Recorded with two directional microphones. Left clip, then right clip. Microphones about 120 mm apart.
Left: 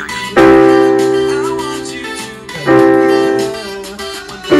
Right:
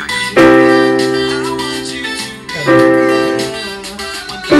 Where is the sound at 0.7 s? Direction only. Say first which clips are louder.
Left 1 dB; 20° left (ahead or behind).